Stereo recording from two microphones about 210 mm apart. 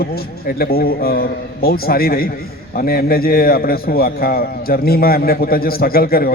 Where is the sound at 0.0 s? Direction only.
45° left (ahead or behind).